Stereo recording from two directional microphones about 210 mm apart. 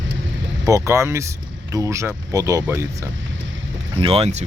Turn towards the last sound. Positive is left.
turn(degrees=-30)  # may be behind; listen again after turning